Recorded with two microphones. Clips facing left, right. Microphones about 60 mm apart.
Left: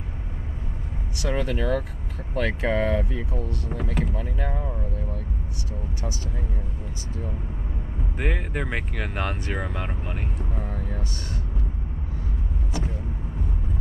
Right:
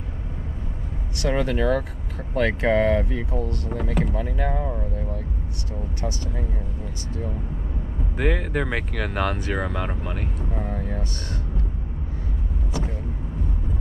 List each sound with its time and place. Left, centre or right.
1.1 s speech: centre
8.2 s speech: centre
10.5 s vehicle: centre